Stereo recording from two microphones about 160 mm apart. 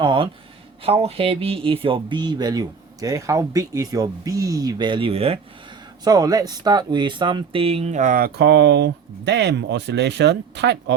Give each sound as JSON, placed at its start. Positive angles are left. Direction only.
{"t": 0.0, "sound": "speech", "side_deg": -30}
{"t": 6.1, "sound": "speech", "side_deg": -25}